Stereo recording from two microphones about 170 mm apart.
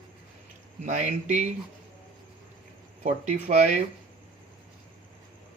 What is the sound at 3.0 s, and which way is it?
Speech, 45° right (ahead or behind).